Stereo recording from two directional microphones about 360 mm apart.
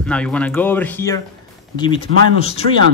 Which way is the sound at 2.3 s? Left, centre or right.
Centre.